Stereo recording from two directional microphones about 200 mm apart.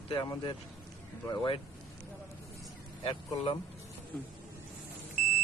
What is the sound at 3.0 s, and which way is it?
Speech, 25° left (ahead or behind).